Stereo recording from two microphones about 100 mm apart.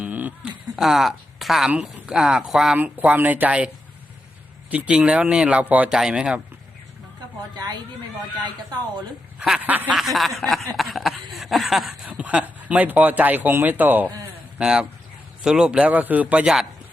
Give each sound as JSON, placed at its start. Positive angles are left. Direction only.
{"t": 0.0, "sound": "a sound", "side_deg": -15}
{"t": 0.8, "sound": "speech", "side_deg": -5}
{"t": 1.7, "sound": "speech", "side_deg": -15}
{"t": 2.7, "sound": "speech", "side_deg": -15}
{"t": 4.7, "sound": "speech", "side_deg": -15}
{"t": 7.5, "sound": "speech", "side_deg": -40}
{"t": 9.6, "sound": "speech", "side_deg": -15}
{"t": 9.9, "sound": "chuckle", "side_deg": 0}
{"t": 12.0, "sound": "speech", "side_deg": -15}
{"t": 14.6, "sound": "speech", "side_deg": -5}